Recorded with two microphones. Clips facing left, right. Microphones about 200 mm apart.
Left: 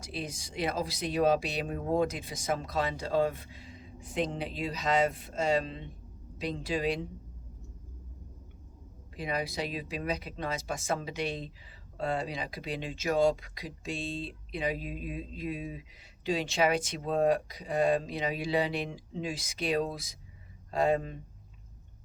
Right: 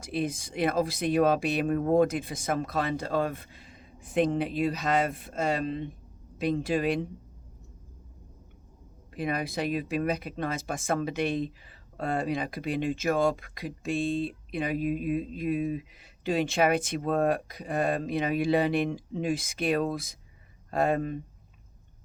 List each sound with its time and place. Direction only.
0.0 s speech: 55° right (ahead or behind)
9.1 s speech: 55° right (ahead or behind)